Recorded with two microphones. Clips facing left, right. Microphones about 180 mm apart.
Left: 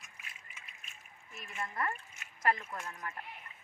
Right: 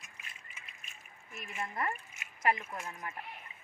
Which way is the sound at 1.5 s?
15° right (ahead or behind).